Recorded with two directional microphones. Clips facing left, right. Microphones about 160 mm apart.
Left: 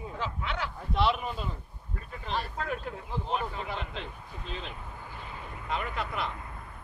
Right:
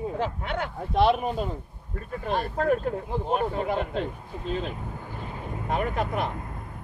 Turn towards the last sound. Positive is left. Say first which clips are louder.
# right 6 dB
turn(degrees=-45)  # may be behind; listen again after turning